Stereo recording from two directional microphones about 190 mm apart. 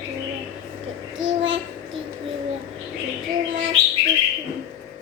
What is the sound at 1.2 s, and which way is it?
Child singing, 90° right.